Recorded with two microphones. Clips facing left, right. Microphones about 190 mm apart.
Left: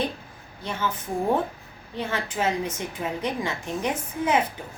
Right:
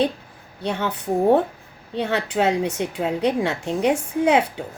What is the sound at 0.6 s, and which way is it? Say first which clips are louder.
Speech: right 5 dB; 70° right (ahead or behind).